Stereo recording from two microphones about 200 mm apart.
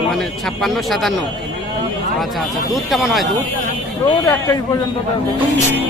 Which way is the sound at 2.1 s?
Centre (ahead or behind).